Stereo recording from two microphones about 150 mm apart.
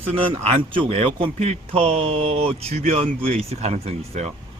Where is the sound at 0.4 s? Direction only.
40° right (ahead or behind).